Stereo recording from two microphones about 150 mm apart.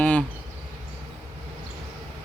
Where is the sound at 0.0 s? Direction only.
10° left (ahead or behind).